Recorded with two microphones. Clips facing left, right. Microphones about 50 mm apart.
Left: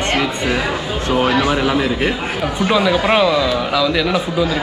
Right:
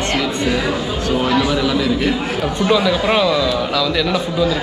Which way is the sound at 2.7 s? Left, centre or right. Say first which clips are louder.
Left 1 dB; centre.